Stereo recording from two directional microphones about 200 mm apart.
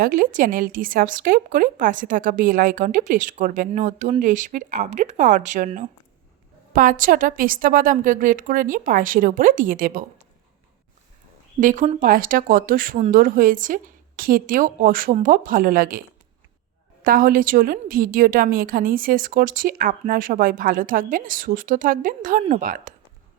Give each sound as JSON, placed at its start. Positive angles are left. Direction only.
{"t": 0.0, "sound": "a woman's voice", "side_deg": -45}
{"t": 11.6, "sound": "a woman's voice", "side_deg": -40}